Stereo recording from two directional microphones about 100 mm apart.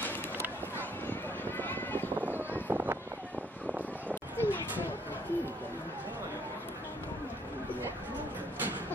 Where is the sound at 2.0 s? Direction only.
20° right (ahead or behind).